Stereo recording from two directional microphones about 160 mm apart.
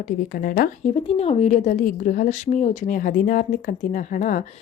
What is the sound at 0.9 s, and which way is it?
A woman's voice, 40° left (ahead or behind).